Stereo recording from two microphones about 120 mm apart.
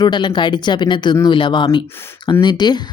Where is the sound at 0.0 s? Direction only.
40° left (ahead or behind).